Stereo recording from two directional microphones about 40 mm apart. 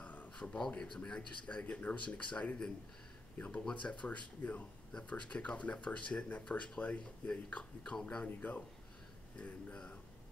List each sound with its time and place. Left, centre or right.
0.0 s a sound: left
0.9 s speech: left
5.1 s speech: left
8.3 s a man's voice: left
9.4 s speech: left